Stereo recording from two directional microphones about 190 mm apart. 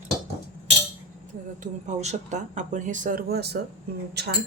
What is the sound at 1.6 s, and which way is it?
Speech, 35° right (ahead or behind).